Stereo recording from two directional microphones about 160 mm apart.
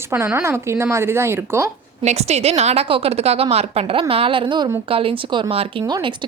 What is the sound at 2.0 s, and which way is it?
A woman's voice, 45° right (ahead or behind).